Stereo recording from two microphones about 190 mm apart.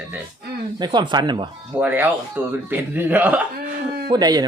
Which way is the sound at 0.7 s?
25° right (ahead or behind).